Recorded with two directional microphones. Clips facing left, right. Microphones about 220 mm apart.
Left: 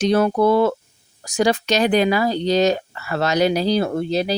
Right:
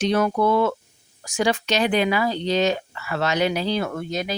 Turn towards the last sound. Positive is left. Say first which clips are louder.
# left 6 dB
turn(degrees=30)  # may be behind; listen again after turning